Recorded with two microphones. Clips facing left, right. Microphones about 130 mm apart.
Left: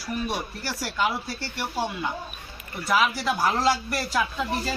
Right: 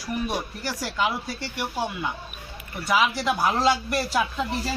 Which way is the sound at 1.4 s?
15° right (ahead or behind).